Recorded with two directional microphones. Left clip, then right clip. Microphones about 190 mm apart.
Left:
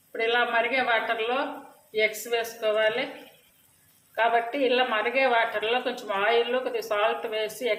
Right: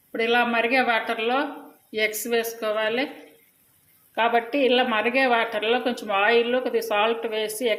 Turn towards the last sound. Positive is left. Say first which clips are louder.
# right 3 dB
turn(degrees=-40)  # may be behind; listen again after turning